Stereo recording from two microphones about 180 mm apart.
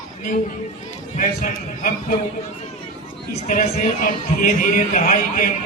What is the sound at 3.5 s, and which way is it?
A man's voice, 50° left (ahead or behind).